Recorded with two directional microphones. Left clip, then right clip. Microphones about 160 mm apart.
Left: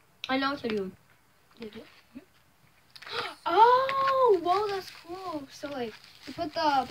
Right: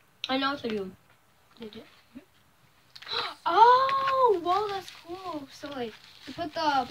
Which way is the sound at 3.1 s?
5° left (ahead or behind).